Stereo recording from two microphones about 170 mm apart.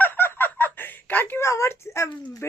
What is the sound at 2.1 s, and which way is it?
Speech, 20° left (ahead or behind).